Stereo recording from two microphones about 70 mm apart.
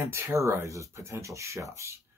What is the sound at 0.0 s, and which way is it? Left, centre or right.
Speech, right.